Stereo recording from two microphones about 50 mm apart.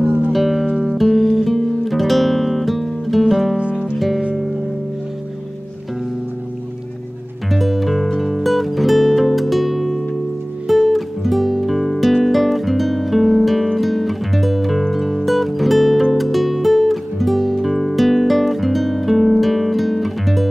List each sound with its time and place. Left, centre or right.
0.0 s music: right
0.3 s music: centre
3.5 s music: centre
7.5 s music: centre